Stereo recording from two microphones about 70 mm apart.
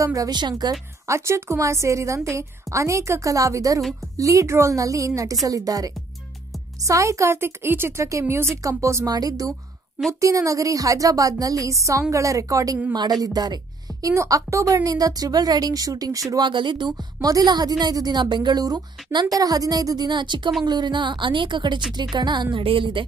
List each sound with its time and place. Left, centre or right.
0.0 s a woman's voice: right
0.3 s a woman's voice: right
1.0 s a woman's voice: right
8.0 s a woman's voice: right
9.0 s a woman's voice: right
12.9 s a woman's voice: right
14.1 s a woman's voice: right
16.3 s a woman's voice: right